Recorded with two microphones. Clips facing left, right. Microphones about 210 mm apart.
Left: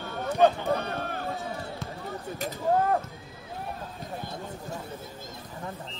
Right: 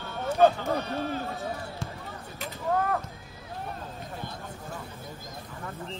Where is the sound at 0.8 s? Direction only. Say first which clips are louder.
Right 2 dB; 55° left (ahead or behind).